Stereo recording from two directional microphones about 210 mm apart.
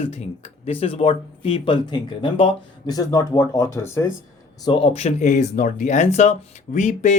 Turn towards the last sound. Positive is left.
turn(degrees=35)  # may be behind; listen again after turning